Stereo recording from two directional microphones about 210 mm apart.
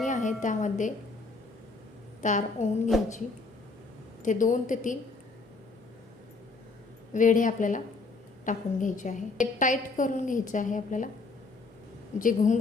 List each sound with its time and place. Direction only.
0.0 s a sound: 35° left (ahead or behind)
2.2 s a woman's voice: 35° left (ahead or behind)
4.2 s a woman's voice: 35° left (ahead or behind)
7.1 s a woman's voice: 40° left (ahead or behind)
12.2 s a woman's voice: 35° left (ahead or behind)